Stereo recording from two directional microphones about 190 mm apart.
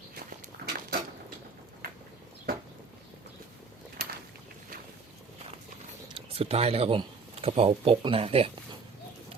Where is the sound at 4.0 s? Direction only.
60° right (ahead or behind).